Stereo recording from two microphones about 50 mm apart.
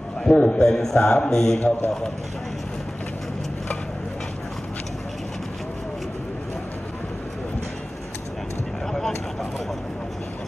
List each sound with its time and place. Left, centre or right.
0.3 s a man's voice: left
8.9 s vehicle: centre